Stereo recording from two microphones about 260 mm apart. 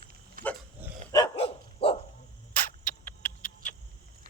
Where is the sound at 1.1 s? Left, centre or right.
Centre.